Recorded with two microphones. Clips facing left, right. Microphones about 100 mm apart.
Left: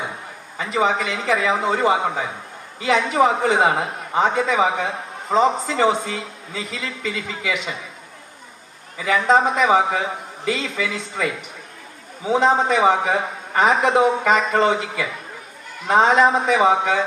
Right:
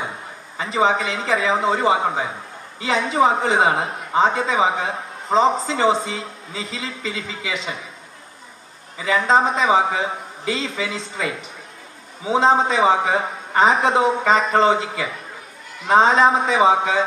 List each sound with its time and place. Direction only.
0.6 s a man's voice: 30° right (ahead or behind)
9.0 s a man's voice: 30° right (ahead or behind)